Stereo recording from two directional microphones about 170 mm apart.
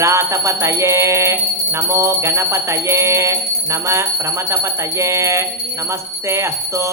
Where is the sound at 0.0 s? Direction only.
15° right (ahead or behind).